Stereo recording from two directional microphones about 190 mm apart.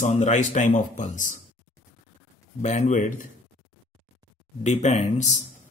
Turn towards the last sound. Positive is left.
turn(degrees=35)  # may be behind; listen again after turning